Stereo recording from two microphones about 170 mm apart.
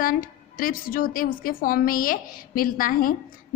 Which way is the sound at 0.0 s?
55° left (ahead or behind).